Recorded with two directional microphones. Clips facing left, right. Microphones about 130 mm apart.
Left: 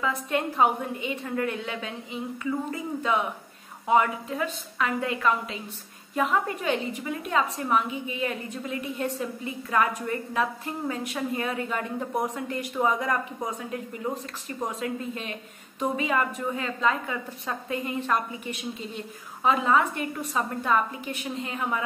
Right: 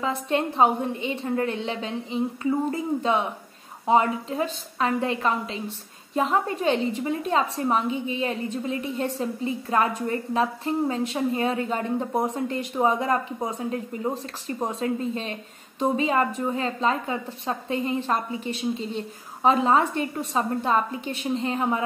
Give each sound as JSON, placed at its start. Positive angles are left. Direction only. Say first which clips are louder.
{"t": 0.0, "sound": "a woman's voice", "louder": "right 2 dB", "side_deg": -30}